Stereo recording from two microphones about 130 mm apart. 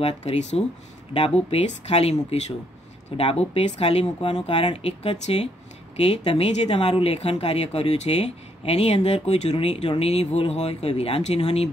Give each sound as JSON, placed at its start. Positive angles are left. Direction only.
{"t": 0.0, "sound": "speech", "side_deg": 60}
{"t": 3.2, "sound": "speech", "side_deg": 50}